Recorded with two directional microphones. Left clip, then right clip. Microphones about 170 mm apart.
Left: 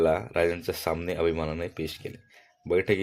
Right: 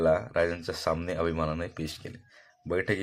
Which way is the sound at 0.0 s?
25° left (ahead or behind).